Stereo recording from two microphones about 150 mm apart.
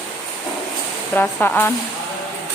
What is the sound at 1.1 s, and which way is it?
Speech, 10° left (ahead or behind).